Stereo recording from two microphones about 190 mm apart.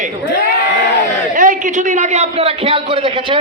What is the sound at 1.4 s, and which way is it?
A man's voice, 45° right (ahead or behind).